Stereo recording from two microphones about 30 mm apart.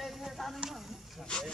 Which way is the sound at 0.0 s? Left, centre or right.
Centre.